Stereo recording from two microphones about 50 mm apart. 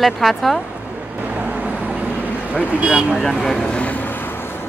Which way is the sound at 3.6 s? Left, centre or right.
Left.